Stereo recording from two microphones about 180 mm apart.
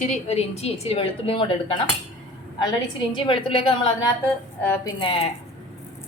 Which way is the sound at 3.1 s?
30° left (ahead or behind).